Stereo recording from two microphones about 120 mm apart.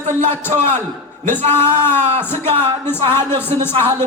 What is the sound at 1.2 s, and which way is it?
Music, 20° left (ahead or behind).